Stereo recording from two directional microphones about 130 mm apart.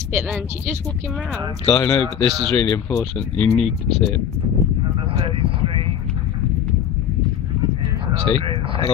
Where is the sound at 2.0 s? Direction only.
45° right (ahead or behind).